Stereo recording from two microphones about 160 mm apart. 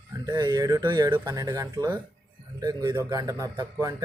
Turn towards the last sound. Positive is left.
turn(degrees=-25)  # may be behind; listen again after turning